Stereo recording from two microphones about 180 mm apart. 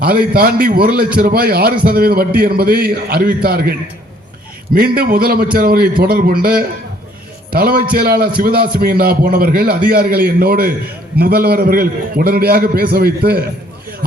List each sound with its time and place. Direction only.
0.0 s a man's voice: 55° right (ahead or behind)